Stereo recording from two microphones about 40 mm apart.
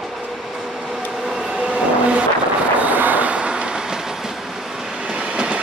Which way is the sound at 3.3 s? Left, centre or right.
Right.